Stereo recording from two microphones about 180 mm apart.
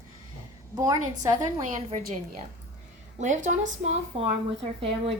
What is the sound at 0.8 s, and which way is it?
Speech, 20° right (ahead or behind).